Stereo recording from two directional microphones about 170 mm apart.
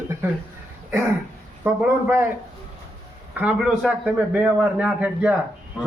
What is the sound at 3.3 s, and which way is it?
Speech, 5° right (ahead or behind).